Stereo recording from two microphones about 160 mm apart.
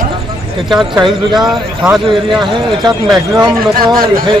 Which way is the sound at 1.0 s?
30° right (ahead or behind).